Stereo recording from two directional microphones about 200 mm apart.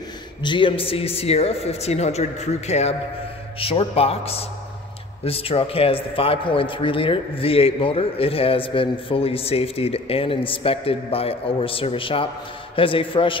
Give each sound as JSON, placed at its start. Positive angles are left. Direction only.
{"t": 0.4, "sound": "a man's voice", "side_deg": 25}